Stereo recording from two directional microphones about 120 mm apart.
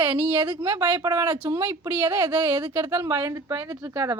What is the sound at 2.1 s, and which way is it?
Speech, 45° right (ahead or behind).